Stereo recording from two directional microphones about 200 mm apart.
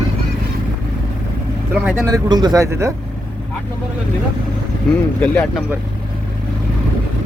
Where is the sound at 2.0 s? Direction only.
20° right (ahead or behind).